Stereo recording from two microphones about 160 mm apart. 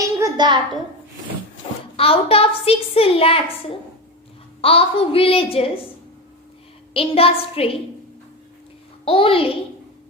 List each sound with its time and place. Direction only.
0.0 s a sound: 20° right (ahead or behind)
2.0 s a woman's voice: 35° left (ahead or behind)
6.9 s a woman's voice: 35° left (ahead or behind)
9.0 s a woman's voice: 35° left (ahead or behind)